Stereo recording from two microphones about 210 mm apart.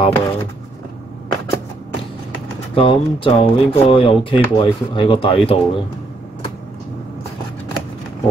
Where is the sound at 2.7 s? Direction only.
25° left (ahead or behind).